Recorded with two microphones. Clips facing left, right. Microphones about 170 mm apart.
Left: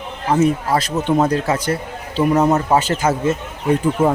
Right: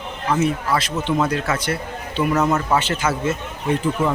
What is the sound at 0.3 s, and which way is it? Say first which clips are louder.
A man's voice: left 4 dB; 40° left (ahead or behind).